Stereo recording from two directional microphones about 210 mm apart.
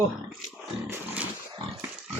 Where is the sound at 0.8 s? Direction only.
10° right (ahead or behind).